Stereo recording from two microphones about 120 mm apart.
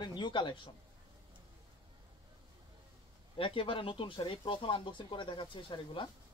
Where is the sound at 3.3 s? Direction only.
45° left (ahead or behind).